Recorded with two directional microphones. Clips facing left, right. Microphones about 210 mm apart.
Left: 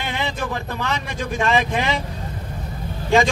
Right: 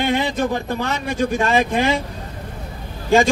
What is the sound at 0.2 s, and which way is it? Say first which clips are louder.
A man's voice: right 5 dB; 35° right (ahead or behind).